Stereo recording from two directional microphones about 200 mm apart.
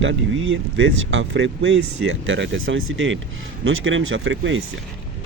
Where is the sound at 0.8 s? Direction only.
70° right (ahead or behind).